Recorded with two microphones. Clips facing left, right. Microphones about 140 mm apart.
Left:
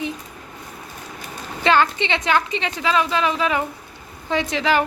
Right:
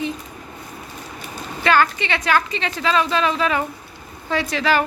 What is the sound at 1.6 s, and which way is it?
A woman's voice, 25° left (ahead or behind).